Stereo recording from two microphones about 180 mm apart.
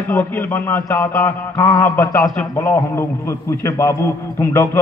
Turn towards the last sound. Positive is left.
turn(degrees=15)  # may be behind; listen again after turning